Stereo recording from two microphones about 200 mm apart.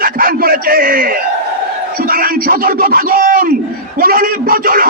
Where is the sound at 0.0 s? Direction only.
45° right (ahead or behind).